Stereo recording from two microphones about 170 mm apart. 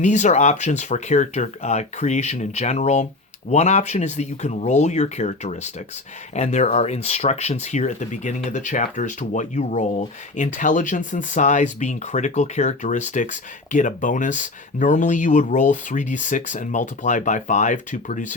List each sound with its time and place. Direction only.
0.0 s speech: 45° left (ahead or behind)